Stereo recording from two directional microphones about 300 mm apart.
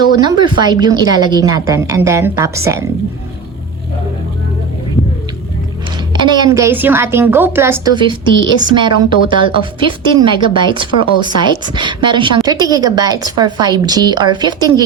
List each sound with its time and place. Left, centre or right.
0.2 s a woman's voice: centre
6.1 s a woman's voice: centre